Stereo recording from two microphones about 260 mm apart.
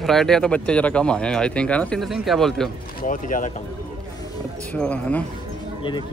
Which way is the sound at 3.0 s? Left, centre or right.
Left.